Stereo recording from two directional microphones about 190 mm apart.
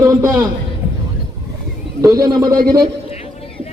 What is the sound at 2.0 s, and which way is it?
Speech, 20° right (ahead or behind).